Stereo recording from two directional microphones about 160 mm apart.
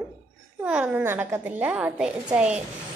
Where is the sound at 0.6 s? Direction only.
10° right (ahead or behind).